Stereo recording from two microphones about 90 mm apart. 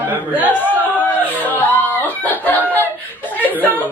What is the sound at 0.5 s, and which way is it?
Speech, 20° left (ahead or behind).